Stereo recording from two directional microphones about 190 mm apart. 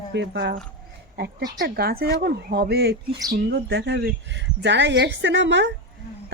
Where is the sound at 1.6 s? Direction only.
55° right (ahead or behind).